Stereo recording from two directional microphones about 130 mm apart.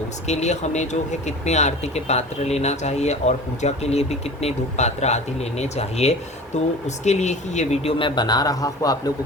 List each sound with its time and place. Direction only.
0.3 s speech: 60° left (ahead or behind); by 9.1 s 30° left (ahead or behind)